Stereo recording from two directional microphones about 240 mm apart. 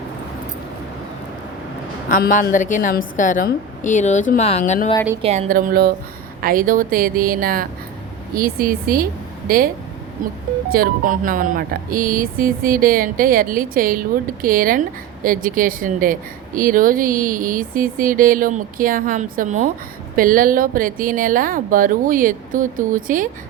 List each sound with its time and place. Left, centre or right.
2.0 s speech: left
5.2 s speech: right
10.7 s speech: right